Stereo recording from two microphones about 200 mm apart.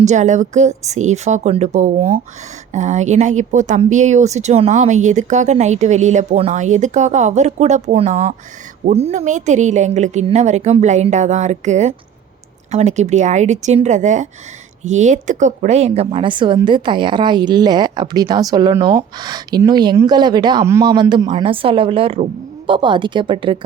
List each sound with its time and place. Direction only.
0.0 s a woman's voice: 35° right (ahead or behind)